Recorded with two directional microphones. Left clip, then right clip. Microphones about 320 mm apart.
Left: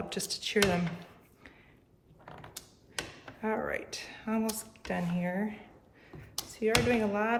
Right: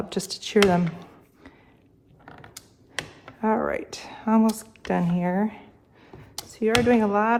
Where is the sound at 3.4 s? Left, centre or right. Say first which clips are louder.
Right 9 dB; centre.